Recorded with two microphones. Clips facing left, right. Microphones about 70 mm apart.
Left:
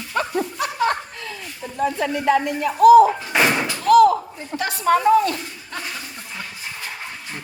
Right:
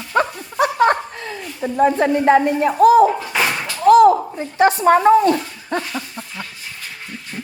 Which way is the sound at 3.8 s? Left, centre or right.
Right.